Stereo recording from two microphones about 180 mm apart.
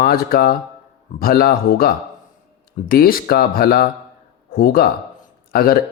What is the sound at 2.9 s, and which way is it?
Speech, 55° left (ahead or behind).